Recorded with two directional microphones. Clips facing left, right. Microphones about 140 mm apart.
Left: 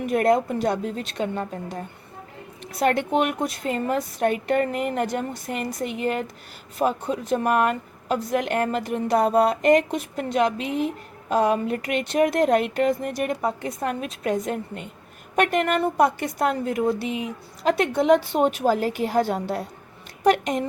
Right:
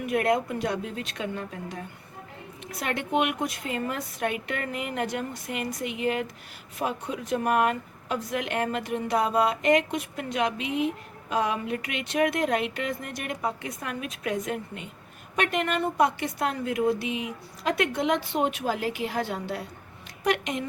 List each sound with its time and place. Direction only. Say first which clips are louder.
0.1 s a woman's voice: left 5 dB; 35° left (ahead or behind)